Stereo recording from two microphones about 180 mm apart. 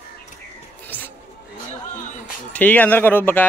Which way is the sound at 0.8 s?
10° left (ahead or behind).